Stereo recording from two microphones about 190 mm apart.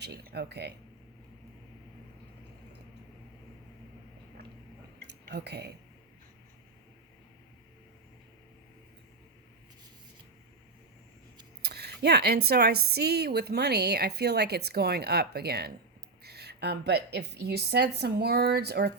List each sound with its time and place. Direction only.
0.0 s a woman's voice: 55° right (ahead or behind)
4.9 s a sound: 55° right (ahead or behind)
11.6 s a woman's voice: 60° right (ahead or behind)